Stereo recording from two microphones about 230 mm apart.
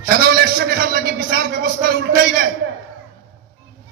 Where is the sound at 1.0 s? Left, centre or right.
Right.